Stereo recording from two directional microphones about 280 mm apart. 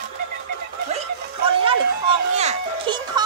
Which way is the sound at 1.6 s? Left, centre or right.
Right.